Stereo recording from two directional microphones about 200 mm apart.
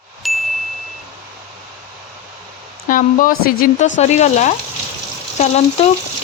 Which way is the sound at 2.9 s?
45° left (ahead or behind).